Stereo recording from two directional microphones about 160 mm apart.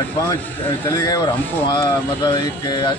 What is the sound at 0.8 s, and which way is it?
Speech, 20° left (ahead or behind).